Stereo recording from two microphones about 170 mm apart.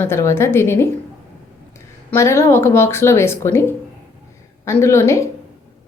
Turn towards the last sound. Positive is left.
turn(degrees=15)  # may be behind; listen again after turning